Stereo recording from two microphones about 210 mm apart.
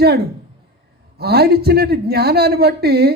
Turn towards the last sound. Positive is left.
turn(degrees=-50)  # may be behind; listen again after turning